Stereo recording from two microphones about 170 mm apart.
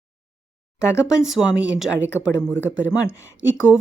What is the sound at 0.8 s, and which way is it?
Speech, 15° left (ahead or behind).